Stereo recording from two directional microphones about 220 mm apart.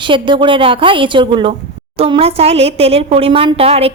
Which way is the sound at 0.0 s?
20° right (ahead or behind).